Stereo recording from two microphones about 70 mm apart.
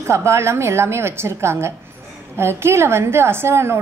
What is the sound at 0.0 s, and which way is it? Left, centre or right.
A woman's voice, right.